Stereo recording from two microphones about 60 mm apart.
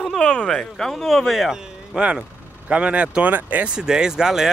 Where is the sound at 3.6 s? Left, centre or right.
Centre.